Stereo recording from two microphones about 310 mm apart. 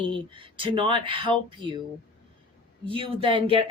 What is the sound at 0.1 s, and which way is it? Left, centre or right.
Speech, centre.